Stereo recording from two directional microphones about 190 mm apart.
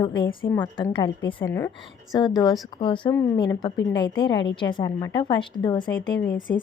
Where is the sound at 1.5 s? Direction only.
10° left (ahead or behind).